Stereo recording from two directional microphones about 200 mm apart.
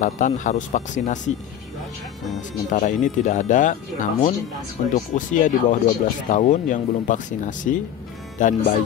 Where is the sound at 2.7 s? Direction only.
40° left (ahead or behind).